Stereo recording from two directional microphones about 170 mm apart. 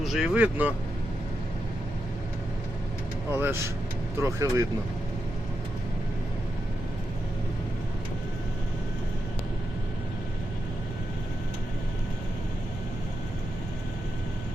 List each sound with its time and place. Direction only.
0.0 s speech: centre (ahead or behind)
3.3 s speech: 15° right (ahead or behind)